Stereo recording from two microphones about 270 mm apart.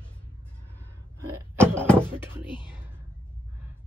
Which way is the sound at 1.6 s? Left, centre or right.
Centre.